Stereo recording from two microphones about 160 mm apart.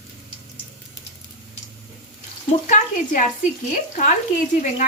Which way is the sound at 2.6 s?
50° left (ahead or behind).